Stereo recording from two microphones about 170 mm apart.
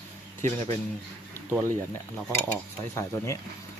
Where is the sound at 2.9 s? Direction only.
20° left (ahead or behind).